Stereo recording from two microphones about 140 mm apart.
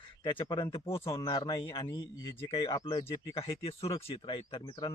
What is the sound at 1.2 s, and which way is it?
Speech, 30° left (ahead or behind).